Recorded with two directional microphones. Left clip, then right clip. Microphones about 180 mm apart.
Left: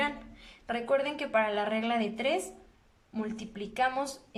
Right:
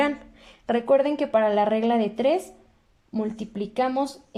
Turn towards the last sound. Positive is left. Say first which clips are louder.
# right 5 dB
turn(degrees=-25)  # may be behind; listen again after turning